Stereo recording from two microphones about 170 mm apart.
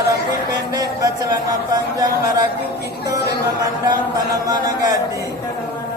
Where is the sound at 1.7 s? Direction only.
20° right (ahead or behind).